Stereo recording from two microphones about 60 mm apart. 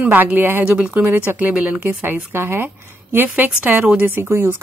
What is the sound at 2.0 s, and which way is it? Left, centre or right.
A woman's voice, right.